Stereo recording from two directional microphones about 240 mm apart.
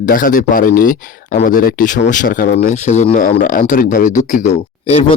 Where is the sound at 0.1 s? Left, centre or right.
Left.